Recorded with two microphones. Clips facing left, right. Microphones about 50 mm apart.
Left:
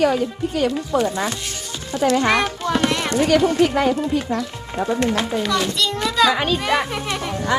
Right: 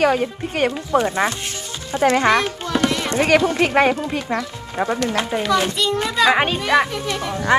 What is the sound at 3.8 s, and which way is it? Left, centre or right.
Speech, right.